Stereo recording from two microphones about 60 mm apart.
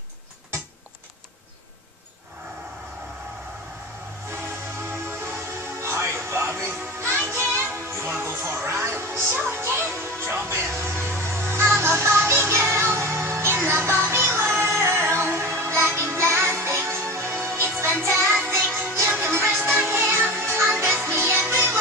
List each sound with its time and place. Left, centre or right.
4.8 s music: right
19.0 s music: right
19.3 s music: right